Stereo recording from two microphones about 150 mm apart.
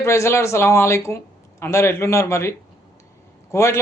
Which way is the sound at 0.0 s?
20° left (ahead or behind).